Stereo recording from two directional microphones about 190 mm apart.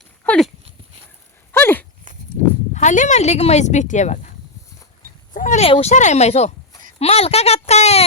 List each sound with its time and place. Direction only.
0.3 s speech: centre (ahead or behind)
1.5 s dog: 10° left (ahead or behind)
2.7 s speech: 40° left (ahead or behind)
5.3 s speech: 40° left (ahead or behind)